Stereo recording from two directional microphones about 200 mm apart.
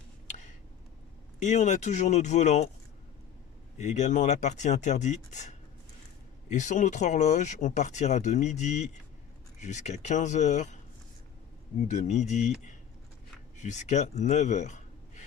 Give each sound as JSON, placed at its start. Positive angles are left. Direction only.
{"t": 0.3, "sound": "a sound", "side_deg": 35}
{"t": 1.4, "sound": "speech", "side_deg": 35}
{"t": 3.8, "sound": "speech", "side_deg": 35}
{"t": 11.8, "sound": "speech", "side_deg": 35}
{"t": 13.6, "sound": "speech", "side_deg": 35}